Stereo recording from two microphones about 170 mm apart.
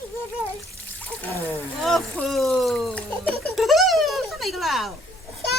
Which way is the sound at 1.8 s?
Centre (ahead or behind).